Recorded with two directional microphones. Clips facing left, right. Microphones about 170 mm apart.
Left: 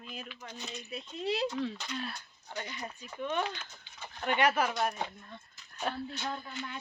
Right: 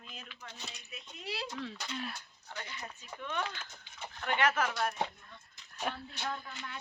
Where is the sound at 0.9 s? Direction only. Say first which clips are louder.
Left 10 dB; 30° left (ahead or behind).